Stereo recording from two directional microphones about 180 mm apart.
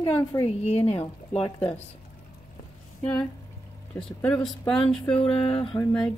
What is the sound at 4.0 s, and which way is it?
Speech, 10° left (ahead or behind).